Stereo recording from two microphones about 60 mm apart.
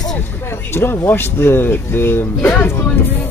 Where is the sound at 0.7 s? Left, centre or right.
Left.